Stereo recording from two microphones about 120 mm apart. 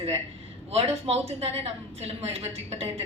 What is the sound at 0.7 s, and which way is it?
Speech, 60° right (ahead or behind).